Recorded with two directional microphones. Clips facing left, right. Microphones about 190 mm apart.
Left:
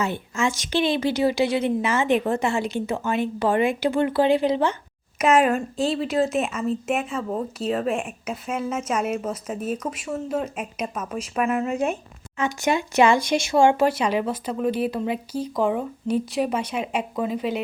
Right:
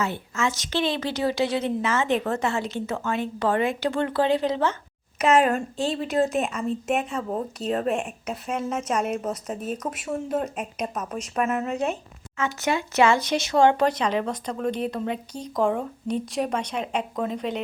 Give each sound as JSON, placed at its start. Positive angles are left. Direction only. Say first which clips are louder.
{"t": 0.0, "sound": "a woman's voice", "louder": "left 2 dB", "side_deg": 15}
{"t": 5.8, "sound": "speech", "louder": "left 4 dB", "side_deg": -40}
{"t": 6.1, "sound": "a woman's voice", "louder": "left 1 dB", "side_deg": 0}